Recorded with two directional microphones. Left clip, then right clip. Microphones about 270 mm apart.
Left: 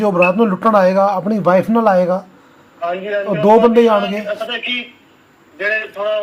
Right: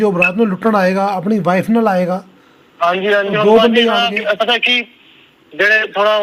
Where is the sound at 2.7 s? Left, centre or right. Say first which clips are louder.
Right 6 dB; right.